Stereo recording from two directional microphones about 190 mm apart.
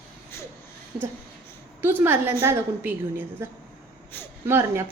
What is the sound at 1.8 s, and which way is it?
A woman's voice, 10° right (ahead or behind).